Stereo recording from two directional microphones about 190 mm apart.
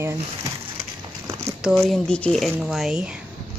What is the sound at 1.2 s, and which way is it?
Speech, 5° right (ahead or behind).